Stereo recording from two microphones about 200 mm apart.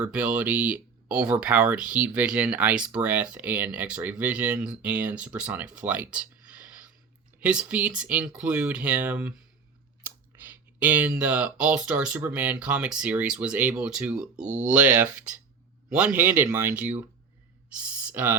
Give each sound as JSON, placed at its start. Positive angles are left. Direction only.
{"t": 0.0, "sound": "speech", "side_deg": -5}
{"t": 14.4, "sound": "speech", "side_deg": -35}
{"t": 14.7, "sound": "speech", "side_deg": -5}
{"t": 17.8, "sound": "a sound", "side_deg": -10}